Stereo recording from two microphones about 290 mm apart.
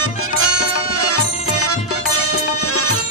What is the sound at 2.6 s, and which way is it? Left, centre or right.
Music, left.